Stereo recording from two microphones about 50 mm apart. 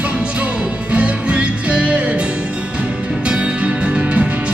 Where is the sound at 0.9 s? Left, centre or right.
Right.